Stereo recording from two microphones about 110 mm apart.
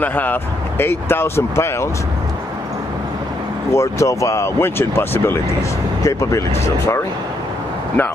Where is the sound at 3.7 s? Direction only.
25° left (ahead or behind).